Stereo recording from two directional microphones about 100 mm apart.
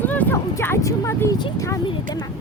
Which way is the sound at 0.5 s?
30° left (ahead or behind).